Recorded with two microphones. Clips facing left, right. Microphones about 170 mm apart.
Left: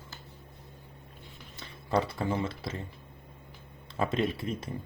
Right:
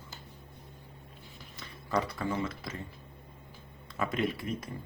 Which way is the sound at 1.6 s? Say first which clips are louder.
Left 3 dB; 30° left (ahead or behind).